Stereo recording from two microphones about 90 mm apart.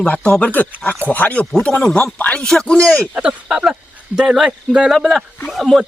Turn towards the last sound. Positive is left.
turn(degrees=0)  # may be behind; listen again after turning